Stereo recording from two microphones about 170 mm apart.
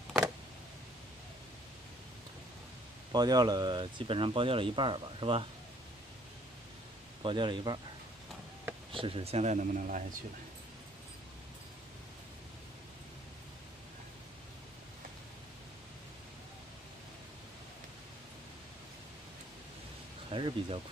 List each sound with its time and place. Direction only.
3.1 s speech: 25° right (ahead or behind)
7.2 s speech: 30° right (ahead or behind)
8.9 s speech: 35° right (ahead or behind); by 10.0 s 50° right (ahead or behind)
20.2 s speech: 30° right (ahead or behind)